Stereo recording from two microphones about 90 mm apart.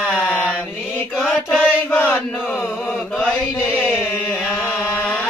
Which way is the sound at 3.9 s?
20° left (ahead or behind).